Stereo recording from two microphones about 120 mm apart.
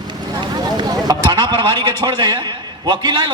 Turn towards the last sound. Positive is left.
turn(degrees=-40)  # may be behind; listen again after turning